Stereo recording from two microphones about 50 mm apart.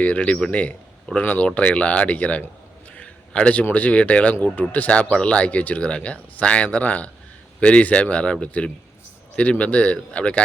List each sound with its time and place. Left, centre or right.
0.0 s speech: left
1.5 s speech: left